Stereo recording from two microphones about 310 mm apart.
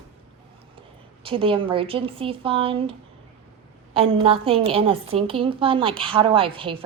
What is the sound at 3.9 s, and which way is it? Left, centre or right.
A woman's voice, centre.